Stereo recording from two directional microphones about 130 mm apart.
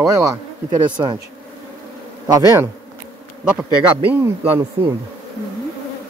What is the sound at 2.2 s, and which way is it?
Speech, 30° right (ahead or behind).